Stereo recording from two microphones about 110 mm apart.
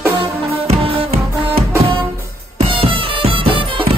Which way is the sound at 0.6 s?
60° right (ahead or behind).